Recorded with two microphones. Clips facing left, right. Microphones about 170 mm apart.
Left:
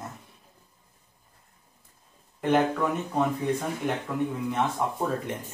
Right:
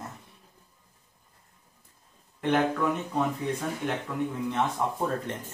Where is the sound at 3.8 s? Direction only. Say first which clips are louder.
Left 3 dB; 5° left (ahead or behind).